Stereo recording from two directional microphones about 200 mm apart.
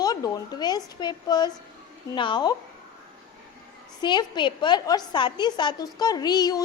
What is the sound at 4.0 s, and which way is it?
A woman's voice, 20° left (ahead or behind).